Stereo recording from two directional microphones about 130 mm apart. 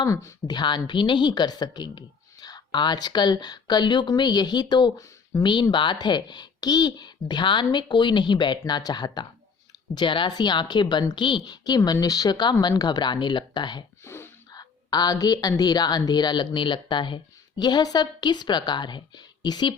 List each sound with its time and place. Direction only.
0.0 s speech: 25° left (ahead or behind)
0.5 s a woman's voice: 35° left (ahead or behind)
14.0 s a sound: 20° left (ahead or behind)
14.5 s a woman's voice: 30° left (ahead or behind)